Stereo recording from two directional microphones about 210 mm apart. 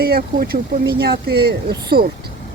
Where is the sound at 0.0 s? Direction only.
45° right (ahead or behind).